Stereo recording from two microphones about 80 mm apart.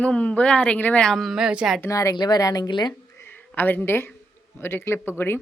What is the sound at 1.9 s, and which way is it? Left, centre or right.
Speech, left.